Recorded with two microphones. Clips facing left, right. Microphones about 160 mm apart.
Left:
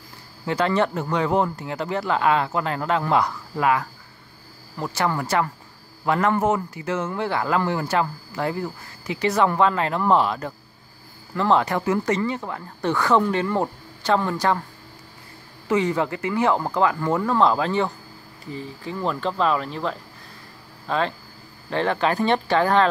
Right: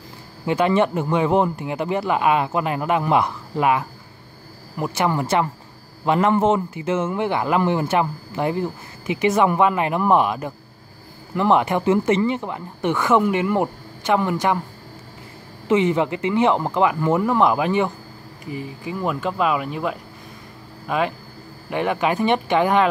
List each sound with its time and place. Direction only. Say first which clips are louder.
0.5 s speech: right 3 dB; 15° right (ahead or behind)
15.7 s speech: right 3 dB; 20° right (ahead or behind)